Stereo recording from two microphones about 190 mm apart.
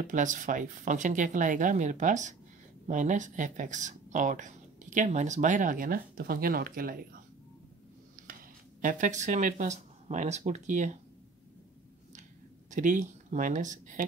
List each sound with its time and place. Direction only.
0.0 s speech: 40° right (ahead or behind)
8.2 s a sound: 45° right (ahead or behind)
8.8 s speech: 40° right (ahead or behind)
12.7 s speech: 40° right (ahead or behind)